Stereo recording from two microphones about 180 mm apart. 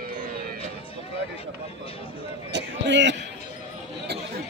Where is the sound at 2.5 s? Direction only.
75° right (ahead or behind).